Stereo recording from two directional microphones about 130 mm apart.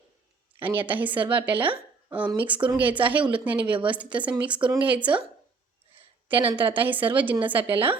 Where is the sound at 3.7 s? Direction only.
40° right (ahead or behind).